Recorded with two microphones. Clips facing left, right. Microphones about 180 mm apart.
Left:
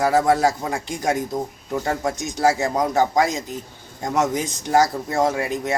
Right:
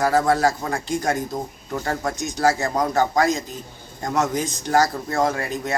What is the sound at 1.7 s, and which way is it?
Speech, 10° left (ahead or behind).